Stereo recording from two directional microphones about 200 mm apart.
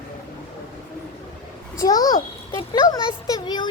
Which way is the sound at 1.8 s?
20° left (ahead or behind).